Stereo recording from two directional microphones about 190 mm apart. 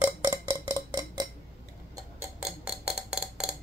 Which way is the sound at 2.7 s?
5° right (ahead or behind).